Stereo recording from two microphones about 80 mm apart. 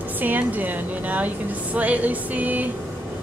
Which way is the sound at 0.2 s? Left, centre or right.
Right.